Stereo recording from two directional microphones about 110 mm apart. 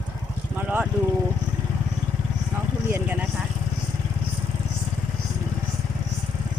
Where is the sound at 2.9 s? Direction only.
15° right (ahead or behind).